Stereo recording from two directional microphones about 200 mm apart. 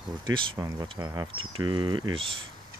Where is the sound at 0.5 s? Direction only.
15° right (ahead or behind).